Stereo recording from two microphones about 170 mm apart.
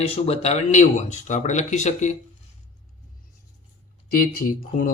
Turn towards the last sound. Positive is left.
turn(degrees=55)  # may be behind; listen again after turning